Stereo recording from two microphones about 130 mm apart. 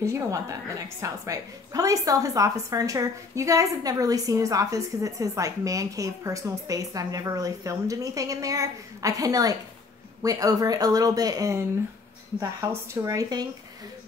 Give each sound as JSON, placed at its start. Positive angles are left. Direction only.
{"t": 0.0, "sound": "a woman's voice", "side_deg": -25}